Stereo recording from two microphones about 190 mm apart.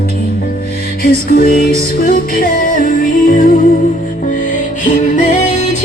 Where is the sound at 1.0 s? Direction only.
50° left (ahead or behind).